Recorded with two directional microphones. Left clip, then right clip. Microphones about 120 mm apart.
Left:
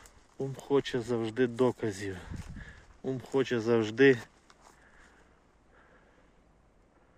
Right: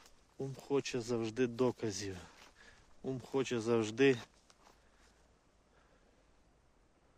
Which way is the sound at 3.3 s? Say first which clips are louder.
Left 6 dB; 20° right (ahead or behind).